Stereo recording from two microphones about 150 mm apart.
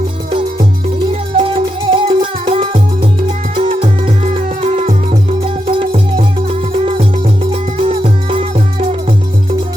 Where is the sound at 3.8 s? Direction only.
50° right (ahead or behind).